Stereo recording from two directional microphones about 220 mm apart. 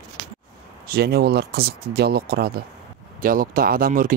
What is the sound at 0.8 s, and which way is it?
Speech, 45° right (ahead or behind).